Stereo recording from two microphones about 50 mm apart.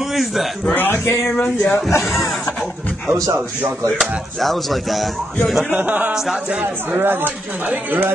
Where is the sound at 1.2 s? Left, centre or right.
Left.